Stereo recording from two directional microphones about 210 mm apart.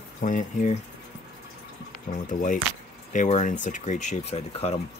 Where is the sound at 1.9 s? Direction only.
40° left (ahead or behind).